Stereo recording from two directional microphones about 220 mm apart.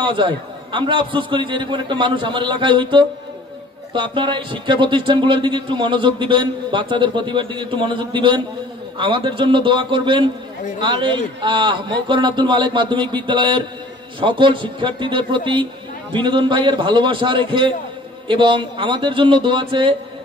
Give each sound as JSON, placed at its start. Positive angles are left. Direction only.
{"t": 0.0, "sound": "speech", "side_deg": -20}